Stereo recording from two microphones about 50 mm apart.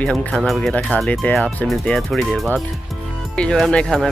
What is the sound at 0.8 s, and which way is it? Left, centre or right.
Speech, left.